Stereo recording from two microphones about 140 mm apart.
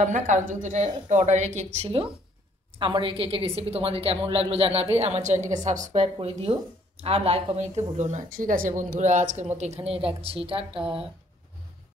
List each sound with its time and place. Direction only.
0.0 s a woman's voice: 65° right (ahead or behind)
6.1 s speech: 40° right (ahead or behind)